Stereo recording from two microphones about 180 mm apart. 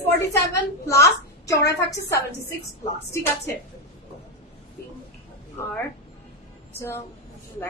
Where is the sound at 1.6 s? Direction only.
75° left (ahead or behind).